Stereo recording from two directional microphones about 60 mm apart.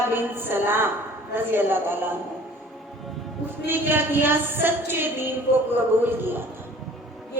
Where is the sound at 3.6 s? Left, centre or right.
Right.